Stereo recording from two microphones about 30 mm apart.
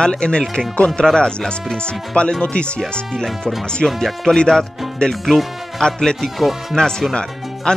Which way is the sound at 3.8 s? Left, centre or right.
Left.